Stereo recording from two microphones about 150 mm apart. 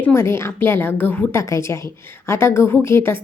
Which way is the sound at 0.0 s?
15° left (ahead or behind).